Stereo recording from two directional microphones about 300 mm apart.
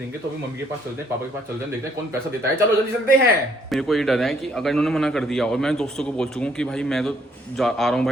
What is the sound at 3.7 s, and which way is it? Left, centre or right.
A man's voice, centre.